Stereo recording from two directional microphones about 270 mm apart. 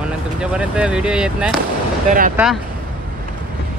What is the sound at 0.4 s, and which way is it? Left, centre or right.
Speech, centre.